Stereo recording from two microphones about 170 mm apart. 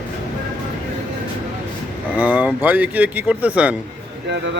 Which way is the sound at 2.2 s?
10° right (ahead or behind).